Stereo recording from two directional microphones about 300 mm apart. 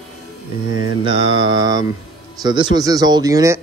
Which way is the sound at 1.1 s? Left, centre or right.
Centre.